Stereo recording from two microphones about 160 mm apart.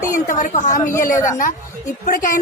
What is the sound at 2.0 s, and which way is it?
Speech, 60° left (ahead or behind).